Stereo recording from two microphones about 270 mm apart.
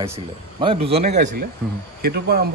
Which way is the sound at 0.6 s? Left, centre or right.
Right.